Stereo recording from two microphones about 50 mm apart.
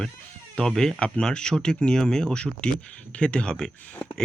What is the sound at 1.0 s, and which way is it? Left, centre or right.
Speech, centre.